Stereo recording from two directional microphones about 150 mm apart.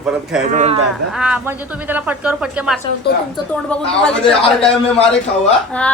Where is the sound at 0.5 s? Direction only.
45° right (ahead or behind).